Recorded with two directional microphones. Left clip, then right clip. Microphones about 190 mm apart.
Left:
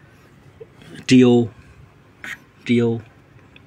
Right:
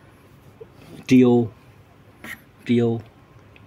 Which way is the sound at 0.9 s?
15° left (ahead or behind).